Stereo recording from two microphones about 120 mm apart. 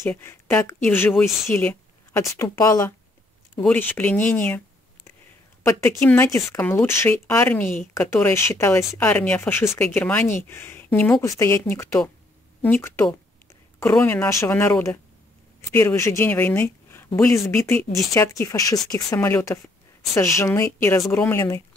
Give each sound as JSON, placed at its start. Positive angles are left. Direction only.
{"t": 0.2, "sound": "speech", "side_deg": 20}
{"t": 1.1, "sound": "speech", "side_deg": 0}
{"t": 1.5, "sound": "a woman's voice", "side_deg": 20}
{"t": 3.6, "sound": "speech", "side_deg": 15}
{"t": 5.6, "sound": "speech", "side_deg": 25}
{"t": 11.2, "sound": "speech", "side_deg": 25}